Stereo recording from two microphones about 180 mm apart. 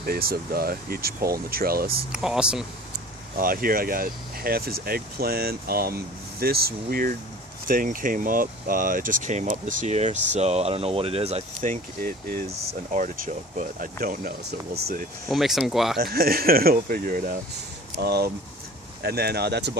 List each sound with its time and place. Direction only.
0.0 s speech: 55° right (ahead or behind)
2.1 s speech: 5° right (ahead or behind)
3.4 s speech: 55° right (ahead or behind)
15.3 s speech: centre (ahead or behind)
16.0 s speech: 55° right (ahead or behind)
18.0 s speech: 65° right (ahead or behind)